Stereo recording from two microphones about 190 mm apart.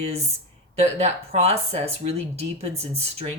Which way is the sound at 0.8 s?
35° right (ahead or behind).